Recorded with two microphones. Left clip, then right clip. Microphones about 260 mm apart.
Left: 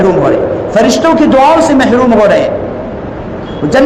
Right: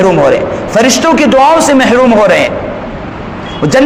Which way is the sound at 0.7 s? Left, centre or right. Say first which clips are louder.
Right 1 dB; right.